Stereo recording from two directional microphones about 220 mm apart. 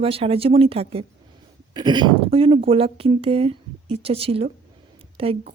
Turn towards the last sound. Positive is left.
turn(degrees=-25)  # may be behind; listen again after turning